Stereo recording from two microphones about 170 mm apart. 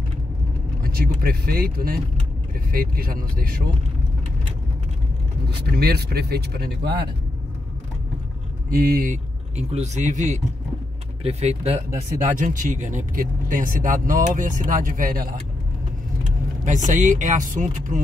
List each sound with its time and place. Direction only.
0.9 s speech: 65° right (ahead or behind)
5.8 s speech: 65° right (ahead or behind)
8.7 s speech: 60° right (ahead or behind)
16.6 s speech: 50° right (ahead or behind)